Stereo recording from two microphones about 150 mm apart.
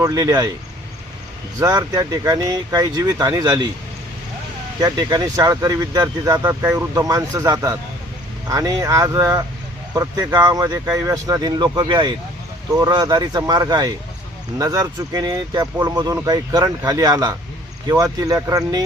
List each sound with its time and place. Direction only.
0.0 s speech: 25° right (ahead or behind)
1.5 s speech: 25° right (ahead or behind)
4.8 s speech: 25° right (ahead or behind)
6.4 s speech: 15° right (ahead or behind)